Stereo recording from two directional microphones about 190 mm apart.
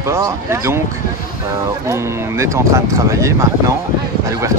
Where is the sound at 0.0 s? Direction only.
15° right (ahead or behind).